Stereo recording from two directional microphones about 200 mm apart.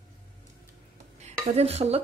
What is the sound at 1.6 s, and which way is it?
Speech, 30° right (ahead or behind).